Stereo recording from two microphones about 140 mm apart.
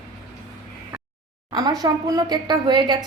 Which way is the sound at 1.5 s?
30° right (ahead or behind).